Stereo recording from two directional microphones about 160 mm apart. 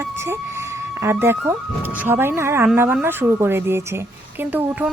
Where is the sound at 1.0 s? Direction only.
15° right (ahead or behind).